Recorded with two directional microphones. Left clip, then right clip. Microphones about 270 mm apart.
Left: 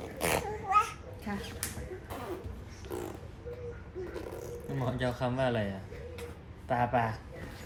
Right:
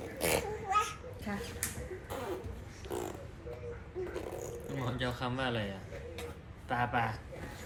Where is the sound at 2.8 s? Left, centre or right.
Centre.